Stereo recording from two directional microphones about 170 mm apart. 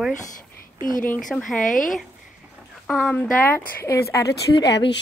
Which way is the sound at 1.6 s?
50° left (ahead or behind).